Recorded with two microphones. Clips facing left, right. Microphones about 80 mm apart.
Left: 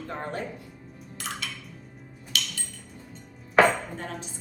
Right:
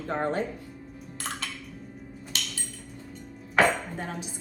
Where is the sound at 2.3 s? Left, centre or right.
Right.